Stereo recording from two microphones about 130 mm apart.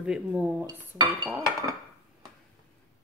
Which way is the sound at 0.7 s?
35° right (ahead or behind).